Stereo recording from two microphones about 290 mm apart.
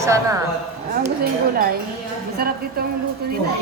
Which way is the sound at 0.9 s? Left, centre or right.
Right.